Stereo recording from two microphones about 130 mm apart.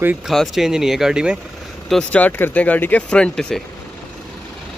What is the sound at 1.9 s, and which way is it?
Speech, 5° left (ahead or behind).